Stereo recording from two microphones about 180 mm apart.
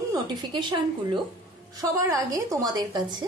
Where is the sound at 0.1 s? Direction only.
25° right (ahead or behind).